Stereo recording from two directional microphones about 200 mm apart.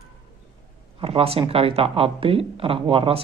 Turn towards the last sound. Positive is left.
turn(degrees=-25)  # may be behind; listen again after turning